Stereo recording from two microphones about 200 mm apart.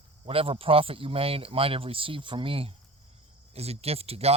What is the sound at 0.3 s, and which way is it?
Speech, 30° right (ahead or behind).